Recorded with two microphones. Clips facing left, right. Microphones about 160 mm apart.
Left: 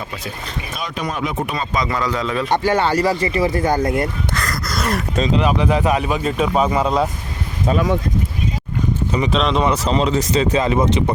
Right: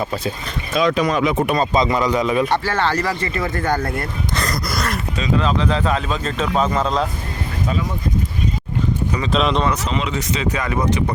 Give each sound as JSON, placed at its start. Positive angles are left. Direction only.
{"t": 0.7, "sound": "speech", "side_deg": -90}
{"t": 1.7, "sound": "a man's voice", "side_deg": -20}
{"t": 2.5, "sound": "speech", "side_deg": 15}
{"t": 4.4, "sound": "gasp", "side_deg": -20}
{"t": 5.4, "sound": "speech", "side_deg": 15}
{"t": 9.3, "sound": "speech", "side_deg": 0}
{"t": 9.7, "sound": "speech", "side_deg": 35}